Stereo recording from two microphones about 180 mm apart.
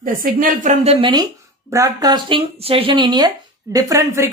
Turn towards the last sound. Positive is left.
turn(degrees=-15)  # may be behind; listen again after turning